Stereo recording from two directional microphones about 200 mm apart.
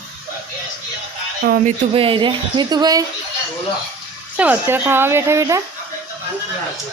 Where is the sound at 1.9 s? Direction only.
25° right (ahead or behind).